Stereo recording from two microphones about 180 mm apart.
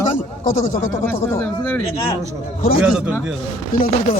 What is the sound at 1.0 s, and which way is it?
Speech, 15° left (ahead or behind).